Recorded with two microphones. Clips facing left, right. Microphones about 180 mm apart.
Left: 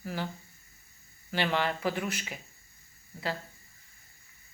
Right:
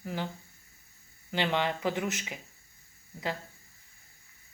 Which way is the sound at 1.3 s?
20° right (ahead or behind).